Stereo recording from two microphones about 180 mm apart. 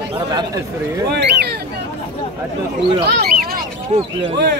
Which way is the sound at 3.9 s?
35° right (ahead or behind).